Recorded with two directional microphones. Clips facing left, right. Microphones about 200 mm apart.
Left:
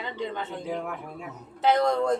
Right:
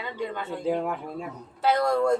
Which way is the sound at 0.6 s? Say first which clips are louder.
Right 5 dB; 30° right (ahead or behind).